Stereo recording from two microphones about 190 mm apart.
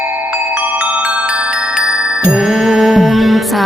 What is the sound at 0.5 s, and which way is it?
Music, 5° right (ahead or behind).